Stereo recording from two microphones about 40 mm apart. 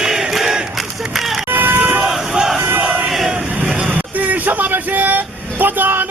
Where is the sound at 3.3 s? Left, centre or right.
Right.